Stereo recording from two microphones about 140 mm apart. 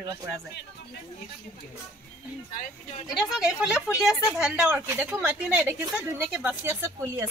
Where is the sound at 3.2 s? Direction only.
5° right (ahead or behind).